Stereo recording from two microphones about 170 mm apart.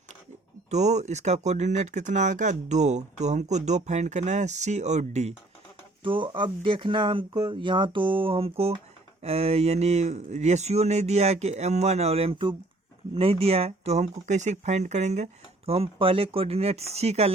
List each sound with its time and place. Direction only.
0.7 s speech: 40° right (ahead or behind)
6.0 s speech: 30° right (ahead or behind)